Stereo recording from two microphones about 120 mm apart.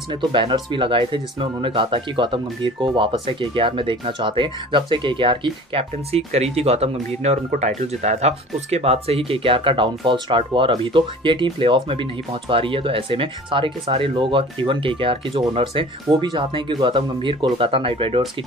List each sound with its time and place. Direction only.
0.1 s speech: 40° right (ahead or behind)
16.1 s speech: 40° right (ahead or behind)